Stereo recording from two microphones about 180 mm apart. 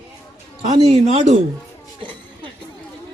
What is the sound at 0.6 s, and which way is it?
Speech, 35° right (ahead or behind).